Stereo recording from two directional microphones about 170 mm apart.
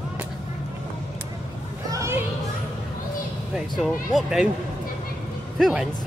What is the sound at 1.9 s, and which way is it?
Children playing, 15° right (ahead or behind).